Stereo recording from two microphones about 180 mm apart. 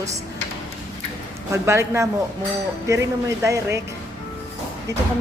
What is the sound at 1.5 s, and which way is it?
Speech, 15° right (ahead or behind).